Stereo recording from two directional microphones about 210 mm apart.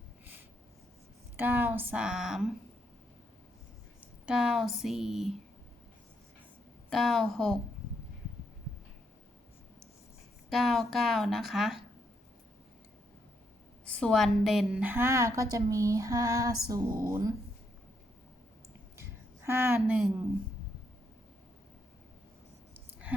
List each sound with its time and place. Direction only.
1.4 s a woman's voice: 10° right (ahead or behind)
4.0 s speech: 5° right (ahead or behind)
6.9 s a woman's voice: centre (ahead or behind)
10.5 s a woman's voice: centre (ahead or behind)
13.8 s a woman's voice: 5° left (ahead or behind); by 17.3 s 15° right (ahead or behind)
18.9 s a sound: 10° right (ahead or behind)
22.7 s a sound: 10° right (ahead or behind)